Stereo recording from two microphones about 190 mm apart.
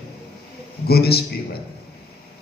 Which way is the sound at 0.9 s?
55° left (ahead or behind).